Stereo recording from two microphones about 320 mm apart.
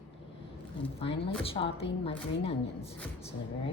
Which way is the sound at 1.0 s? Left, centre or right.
Centre.